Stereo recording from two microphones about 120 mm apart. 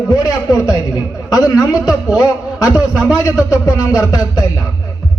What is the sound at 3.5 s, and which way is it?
Speech, 30° left (ahead or behind).